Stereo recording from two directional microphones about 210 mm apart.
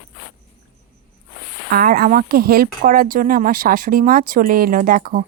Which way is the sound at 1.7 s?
45° right (ahead or behind).